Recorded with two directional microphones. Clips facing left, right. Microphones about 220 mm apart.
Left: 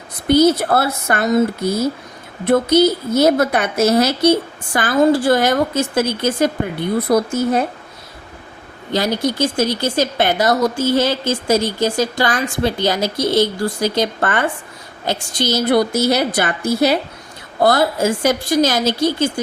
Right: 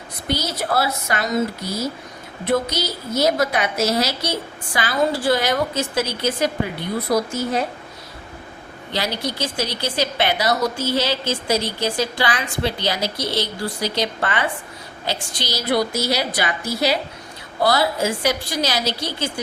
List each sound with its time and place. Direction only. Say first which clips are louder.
0.3 s speech: left 11 dB; 55° left (ahead or behind)
8.9 s speech: left 7 dB; 45° left (ahead or behind)